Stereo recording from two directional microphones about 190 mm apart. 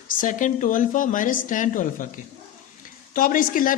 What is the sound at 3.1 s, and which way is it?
Speech, 45° left (ahead or behind).